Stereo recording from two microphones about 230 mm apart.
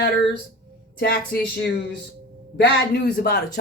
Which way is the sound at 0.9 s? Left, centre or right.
Left.